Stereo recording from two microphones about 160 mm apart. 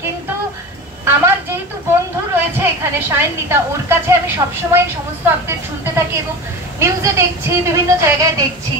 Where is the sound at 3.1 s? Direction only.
15° right (ahead or behind).